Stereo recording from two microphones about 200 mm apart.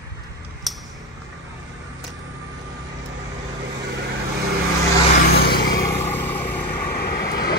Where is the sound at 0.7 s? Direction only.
Centre (ahead or behind).